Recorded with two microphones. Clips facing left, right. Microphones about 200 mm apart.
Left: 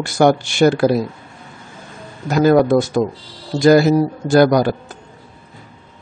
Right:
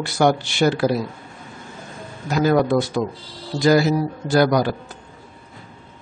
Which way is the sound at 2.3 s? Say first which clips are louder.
Left 5 dB; 50° left (ahead or behind).